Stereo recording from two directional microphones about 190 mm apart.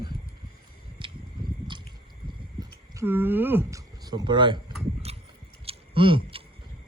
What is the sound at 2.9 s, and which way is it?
Speech, 10° right (ahead or behind).